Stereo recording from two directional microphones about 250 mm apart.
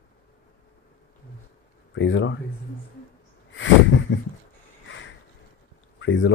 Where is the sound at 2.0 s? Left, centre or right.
Left.